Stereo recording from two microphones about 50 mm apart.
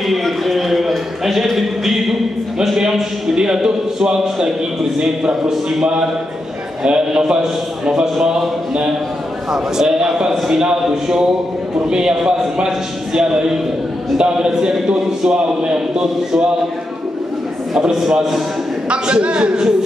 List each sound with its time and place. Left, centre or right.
0.0 s a sound: centre
2.6 s a man's voice: centre
17.7 s a man's voice: centre
18.9 s a man's voice: right